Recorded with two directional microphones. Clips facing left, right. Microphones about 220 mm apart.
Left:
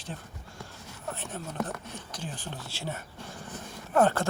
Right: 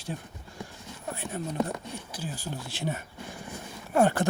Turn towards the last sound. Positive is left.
turn(degrees=-15)  # may be behind; listen again after turning